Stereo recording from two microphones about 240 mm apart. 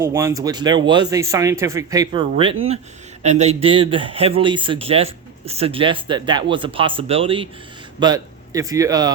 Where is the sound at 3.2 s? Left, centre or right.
Right.